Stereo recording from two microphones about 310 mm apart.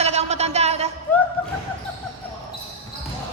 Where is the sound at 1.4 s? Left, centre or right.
Centre.